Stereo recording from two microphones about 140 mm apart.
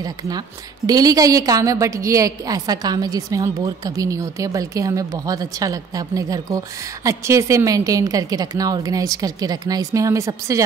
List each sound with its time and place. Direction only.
0.0 s a woman's voice: 25° right (ahead or behind)